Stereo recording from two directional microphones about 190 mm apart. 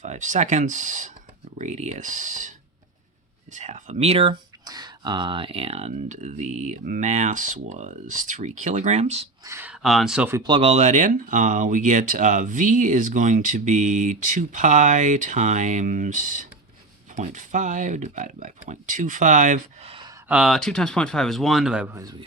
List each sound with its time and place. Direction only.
0.0 s speech: 40° right (ahead or behind)
3.5 s speech: 40° right (ahead or behind)
9.4 s speech: 15° right (ahead or behind)
10.4 s speech: 30° right (ahead or behind)
20.2 s speech: 5° right (ahead or behind)